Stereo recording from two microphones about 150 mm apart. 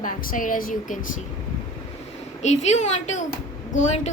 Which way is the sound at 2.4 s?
50° left (ahead or behind).